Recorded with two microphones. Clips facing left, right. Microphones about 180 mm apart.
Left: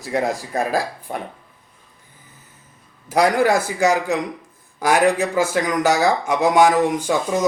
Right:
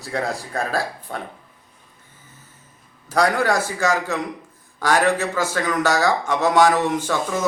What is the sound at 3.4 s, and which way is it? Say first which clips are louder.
Speech: left 4 dB; 15° left (ahead or behind).